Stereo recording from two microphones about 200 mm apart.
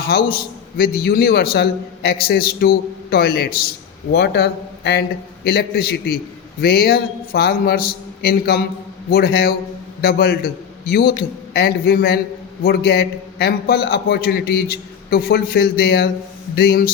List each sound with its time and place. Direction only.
0.1 s a man's voice: 50° left (ahead or behind)